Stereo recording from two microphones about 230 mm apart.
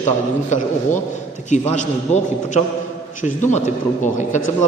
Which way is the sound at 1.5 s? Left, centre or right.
Left.